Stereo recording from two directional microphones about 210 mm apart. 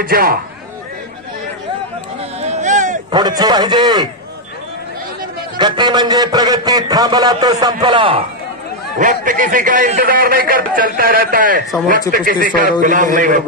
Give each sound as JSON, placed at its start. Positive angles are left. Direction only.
{"t": 0.0, "sound": "speech", "side_deg": -45}
{"t": 2.4, "sound": "a sound", "side_deg": -35}
{"t": 3.1, "sound": "a man's voice", "side_deg": -20}
{"t": 5.6, "sound": "a man's voice", "side_deg": -20}
{"t": 8.9, "sound": "a man's voice", "side_deg": -40}